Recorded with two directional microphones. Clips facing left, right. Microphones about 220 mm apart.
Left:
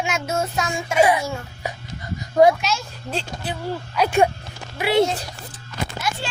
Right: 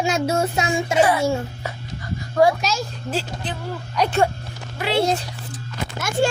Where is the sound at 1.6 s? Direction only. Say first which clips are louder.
Left 1 dB; 15° left (ahead or behind).